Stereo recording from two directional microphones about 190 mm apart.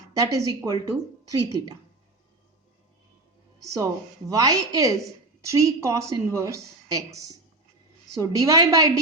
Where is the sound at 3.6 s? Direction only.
15° right (ahead or behind).